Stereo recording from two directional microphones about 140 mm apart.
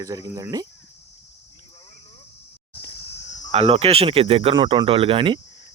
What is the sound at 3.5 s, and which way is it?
Speech, 45° right (ahead or behind).